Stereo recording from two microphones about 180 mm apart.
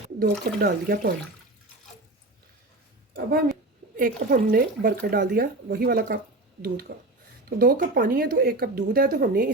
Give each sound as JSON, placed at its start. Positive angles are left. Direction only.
{"t": 0.2, "sound": "speech", "side_deg": -55}
{"t": 3.9, "sound": "speech", "side_deg": -50}